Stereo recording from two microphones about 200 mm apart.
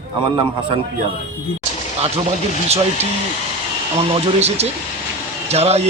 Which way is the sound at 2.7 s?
30° right (ahead or behind).